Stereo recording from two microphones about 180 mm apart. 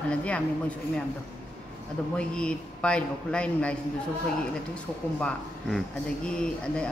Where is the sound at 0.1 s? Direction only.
5° left (ahead or behind).